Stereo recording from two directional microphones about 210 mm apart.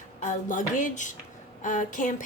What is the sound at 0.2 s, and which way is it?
Speech, 40° left (ahead or behind).